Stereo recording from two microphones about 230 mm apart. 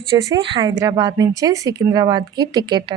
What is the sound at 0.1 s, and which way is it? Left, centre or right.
A woman's voice, centre.